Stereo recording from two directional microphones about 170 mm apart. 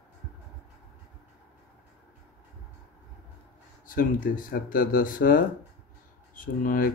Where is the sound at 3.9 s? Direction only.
55° left (ahead or behind).